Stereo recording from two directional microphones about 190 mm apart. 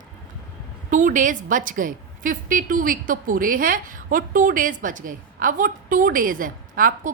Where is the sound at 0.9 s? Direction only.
45° right (ahead or behind).